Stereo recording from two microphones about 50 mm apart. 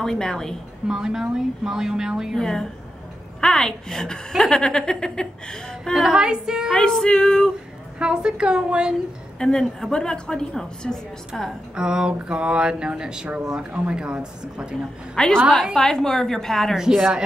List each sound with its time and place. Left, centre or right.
0.0 s a woman's voice: centre
0.8 s speech: centre
2.3 s a woman's voice: centre
6.0 s speech: centre
6.7 s a woman's voice: centre
8.0 s speech: centre
9.4 s a woman's voice: centre
11.7 s speech: centre
15.1 s a woman's voice: centre
16.7 s speech: centre